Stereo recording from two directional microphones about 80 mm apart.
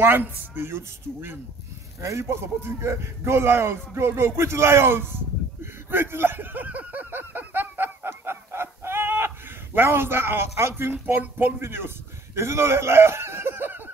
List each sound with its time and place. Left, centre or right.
0.0 s speech: right
4.4 s a sound: right
9.8 s speech: right